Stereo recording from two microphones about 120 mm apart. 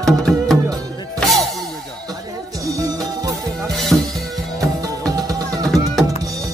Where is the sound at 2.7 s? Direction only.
30° right (ahead or behind).